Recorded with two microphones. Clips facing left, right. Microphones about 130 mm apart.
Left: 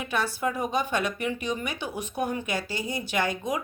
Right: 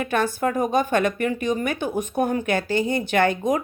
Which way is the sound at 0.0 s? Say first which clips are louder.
Right 6 dB; 50° right (ahead or behind).